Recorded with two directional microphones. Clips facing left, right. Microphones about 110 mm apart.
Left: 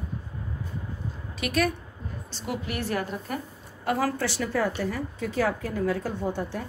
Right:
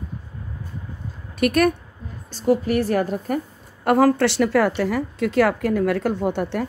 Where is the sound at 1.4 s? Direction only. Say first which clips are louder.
Right 8 dB; 55° right (ahead or behind).